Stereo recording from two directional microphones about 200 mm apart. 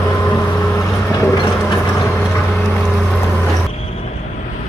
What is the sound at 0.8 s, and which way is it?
Vehicle, 15° left (ahead or behind).